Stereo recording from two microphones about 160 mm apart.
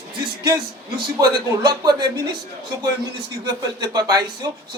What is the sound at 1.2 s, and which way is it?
Speech, 25° right (ahead or behind).